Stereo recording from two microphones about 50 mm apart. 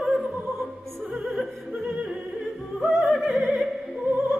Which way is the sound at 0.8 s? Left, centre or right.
Centre.